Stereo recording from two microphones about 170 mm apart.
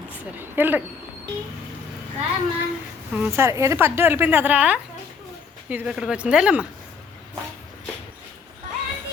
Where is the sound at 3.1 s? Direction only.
10° right (ahead or behind).